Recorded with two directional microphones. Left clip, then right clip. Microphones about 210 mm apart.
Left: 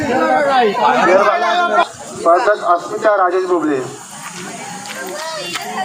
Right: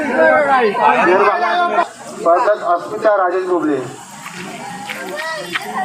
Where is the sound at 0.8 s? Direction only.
50° left (ahead or behind).